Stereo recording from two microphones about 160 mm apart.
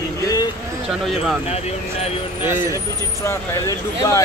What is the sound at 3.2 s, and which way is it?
Speech, 20° left (ahead or behind).